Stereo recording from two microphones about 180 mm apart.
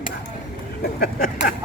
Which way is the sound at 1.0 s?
55° left (ahead or behind).